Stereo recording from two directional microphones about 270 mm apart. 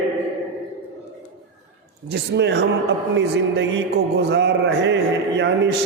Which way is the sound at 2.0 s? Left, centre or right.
Right.